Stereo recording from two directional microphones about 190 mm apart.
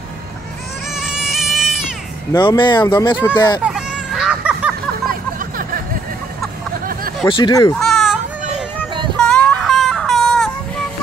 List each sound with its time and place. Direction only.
0.9 s goat: 5° right (ahead or behind)
2.3 s speech: 25° left (ahead or behind)
3.6 s a sound: 5° right (ahead or behind)
7.2 s speech: 25° left (ahead or behind)
7.8 s baby cry: centre (ahead or behind)
9.2 s a sound: 5° left (ahead or behind)